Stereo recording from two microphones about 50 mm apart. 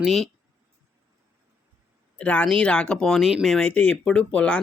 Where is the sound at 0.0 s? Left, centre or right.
Centre.